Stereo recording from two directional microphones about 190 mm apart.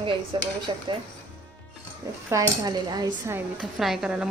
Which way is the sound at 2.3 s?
20° right (ahead or behind).